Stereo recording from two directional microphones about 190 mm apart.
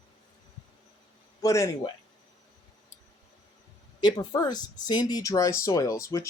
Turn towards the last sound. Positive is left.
turn(degrees=15)  # may be behind; listen again after turning